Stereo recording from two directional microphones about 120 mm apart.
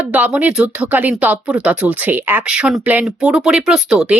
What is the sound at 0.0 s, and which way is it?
Speech, 10° right (ahead or behind).